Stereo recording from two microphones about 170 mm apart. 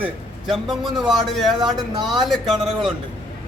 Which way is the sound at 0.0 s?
Centre (ahead or behind).